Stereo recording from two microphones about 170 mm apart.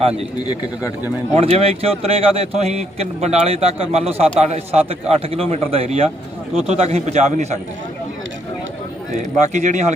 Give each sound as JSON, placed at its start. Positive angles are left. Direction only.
{"t": 0.0, "sound": "a man's voice", "side_deg": -35}
{"t": 1.4, "sound": "a man's voice", "side_deg": -35}
{"t": 9.5, "sound": "speech", "side_deg": -45}